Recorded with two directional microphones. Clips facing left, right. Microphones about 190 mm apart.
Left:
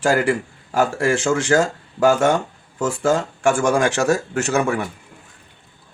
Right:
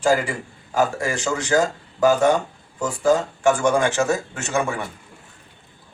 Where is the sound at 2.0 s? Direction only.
80° left.